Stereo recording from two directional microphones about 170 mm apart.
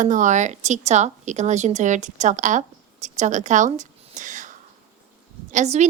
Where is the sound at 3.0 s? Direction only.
45° right (ahead or behind).